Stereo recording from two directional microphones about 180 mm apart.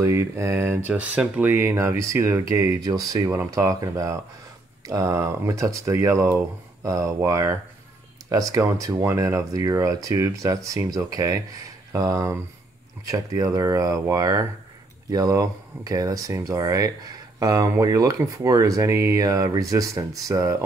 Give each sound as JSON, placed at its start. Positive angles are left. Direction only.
{"t": 0.0, "sound": "speech", "side_deg": -15}